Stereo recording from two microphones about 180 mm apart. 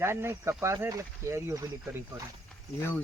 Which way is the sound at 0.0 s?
15° right (ahead or behind).